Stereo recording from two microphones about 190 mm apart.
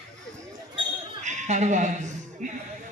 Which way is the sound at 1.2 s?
40° right (ahead or behind).